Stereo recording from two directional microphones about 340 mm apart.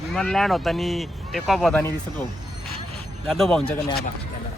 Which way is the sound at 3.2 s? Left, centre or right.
Centre.